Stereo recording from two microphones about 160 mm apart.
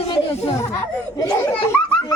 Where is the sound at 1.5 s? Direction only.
5° left (ahead or behind).